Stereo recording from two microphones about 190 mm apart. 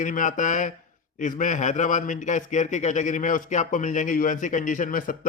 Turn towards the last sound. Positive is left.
turn(degrees=45)  # may be behind; listen again after turning